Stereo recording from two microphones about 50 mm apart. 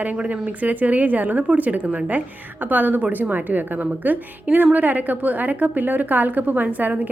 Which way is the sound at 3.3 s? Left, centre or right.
Right.